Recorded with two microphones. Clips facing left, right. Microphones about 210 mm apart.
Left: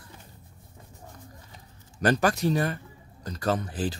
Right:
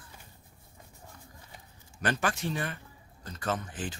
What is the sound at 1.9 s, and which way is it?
A man's voice, 40° left (ahead or behind).